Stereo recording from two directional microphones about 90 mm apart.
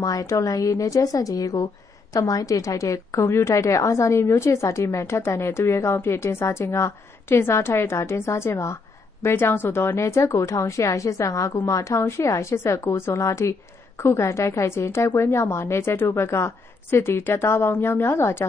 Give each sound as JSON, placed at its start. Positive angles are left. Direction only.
{"t": 0.0, "sound": "a woman's voice", "side_deg": 40}